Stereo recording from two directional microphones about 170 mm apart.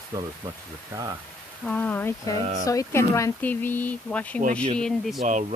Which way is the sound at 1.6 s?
10° left (ahead or behind).